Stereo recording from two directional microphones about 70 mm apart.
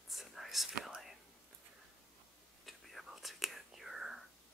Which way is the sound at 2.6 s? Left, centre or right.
Centre.